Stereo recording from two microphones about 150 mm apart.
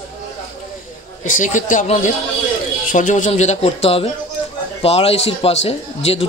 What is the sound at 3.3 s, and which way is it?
A man's voice, 45° left (ahead or behind).